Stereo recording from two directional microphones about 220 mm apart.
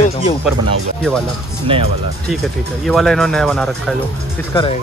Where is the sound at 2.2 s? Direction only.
Centre (ahead or behind).